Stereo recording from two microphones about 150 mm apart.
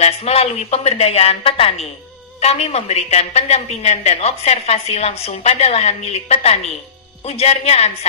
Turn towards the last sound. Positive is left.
turn(degrees=45)  # may be behind; listen again after turning